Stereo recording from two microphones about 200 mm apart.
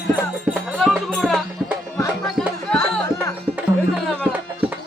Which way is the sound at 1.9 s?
15° left (ahead or behind).